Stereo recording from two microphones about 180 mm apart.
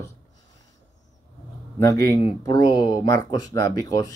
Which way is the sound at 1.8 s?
15° left (ahead or behind).